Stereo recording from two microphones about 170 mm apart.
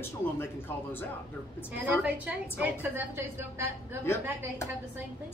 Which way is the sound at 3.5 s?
15° right (ahead or behind).